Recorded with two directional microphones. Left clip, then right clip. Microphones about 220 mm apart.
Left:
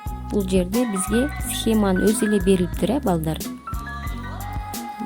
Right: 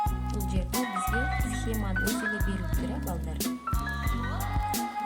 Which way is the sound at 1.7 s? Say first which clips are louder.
Left 14 dB; 45° left (ahead or behind).